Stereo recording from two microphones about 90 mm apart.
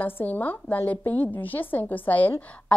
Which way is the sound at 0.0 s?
20° left (ahead or behind).